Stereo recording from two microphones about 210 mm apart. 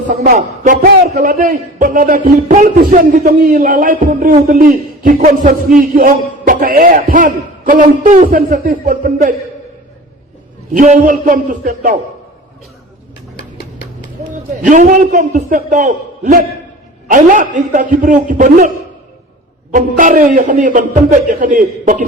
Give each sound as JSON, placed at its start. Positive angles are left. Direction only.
{"t": 0.1, "sound": "a man's voice", "side_deg": -35}
{"t": 10.8, "sound": "a man's voice", "side_deg": -40}
{"t": 14.6, "sound": "a man's voice", "side_deg": -40}
{"t": 19.7, "sound": "a man's voice", "side_deg": -40}